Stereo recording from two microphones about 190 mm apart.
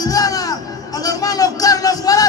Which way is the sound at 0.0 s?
20° left (ahead or behind).